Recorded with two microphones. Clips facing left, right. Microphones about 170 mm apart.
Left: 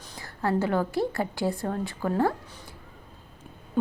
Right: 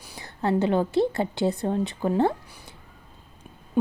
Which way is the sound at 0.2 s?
20° right (ahead or behind).